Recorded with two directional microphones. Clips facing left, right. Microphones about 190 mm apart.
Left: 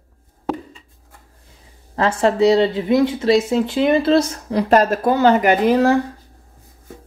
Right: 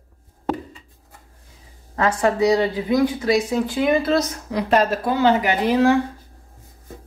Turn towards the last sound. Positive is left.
turn(degrees=45)  # may be behind; listen again after turning